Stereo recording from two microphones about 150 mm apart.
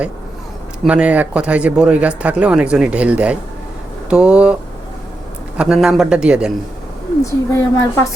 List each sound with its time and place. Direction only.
0.9 s speech: 10° right (ahead or behind)
5.5 s a man's voice: 5° right (ahead or behind)
7.3 s a woman's voice: 15° left (ahead or behind)